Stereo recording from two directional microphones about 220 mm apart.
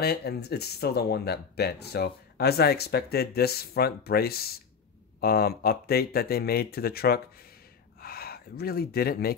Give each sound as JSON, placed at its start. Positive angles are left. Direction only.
{"t": 0.0, "sound": "speech", "side_deg": 45}